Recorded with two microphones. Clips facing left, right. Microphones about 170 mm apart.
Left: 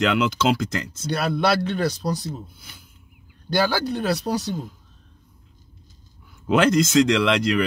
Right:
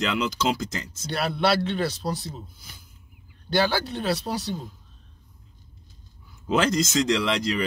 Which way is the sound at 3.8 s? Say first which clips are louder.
Left 4 dB; 45° left (ahead or behind).